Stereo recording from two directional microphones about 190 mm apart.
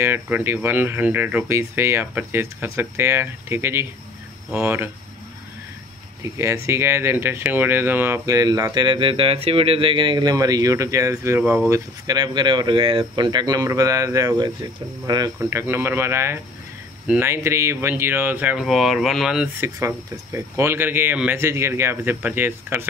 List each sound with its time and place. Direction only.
0.0 s speech: 10° right (ahead or behind)
6.2 s speech: 15° right (ahead or behind)
11.7 s speech: 20° right (ahead or behind); by 19.5 s centre (ahead or behind)
20.3 s speech: 15° right (ahead or behind)